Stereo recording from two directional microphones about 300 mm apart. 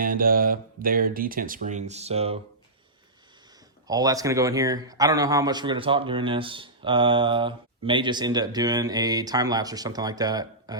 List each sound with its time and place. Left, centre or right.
0.0 s speech: right
3.8 s a man's voice: centre